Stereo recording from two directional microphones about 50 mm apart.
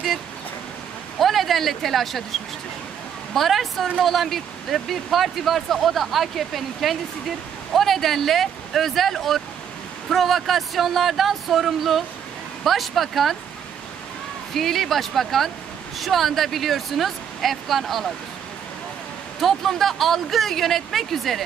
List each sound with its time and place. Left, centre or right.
1.2 s speech: centre
3.3 s speech: centre
14.5 s speech: centre
19.4 s speech: centre